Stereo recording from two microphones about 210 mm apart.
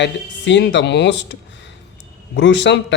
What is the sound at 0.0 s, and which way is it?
Speech, 55° left (ahead or behind).